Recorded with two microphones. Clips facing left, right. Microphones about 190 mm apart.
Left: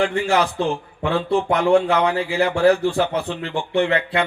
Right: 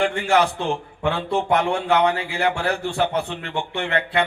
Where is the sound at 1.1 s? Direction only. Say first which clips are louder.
Left 3 dB; 35° left (ahead or behind).